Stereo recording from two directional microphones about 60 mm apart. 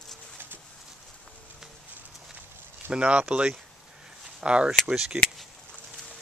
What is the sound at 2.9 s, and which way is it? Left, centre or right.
Speech, centre.